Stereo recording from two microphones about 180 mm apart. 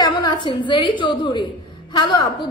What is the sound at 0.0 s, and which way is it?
A woman's voice, 25° left (ahead or behind).